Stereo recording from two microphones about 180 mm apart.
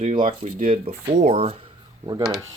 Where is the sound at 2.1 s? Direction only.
20° right (ahead or behind).